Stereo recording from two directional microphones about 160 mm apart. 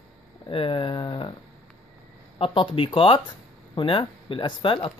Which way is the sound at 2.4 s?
35° left (ahead or behind).